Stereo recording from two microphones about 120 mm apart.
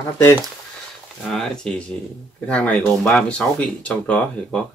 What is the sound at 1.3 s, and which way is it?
Speech, 5° left (ahead or behind).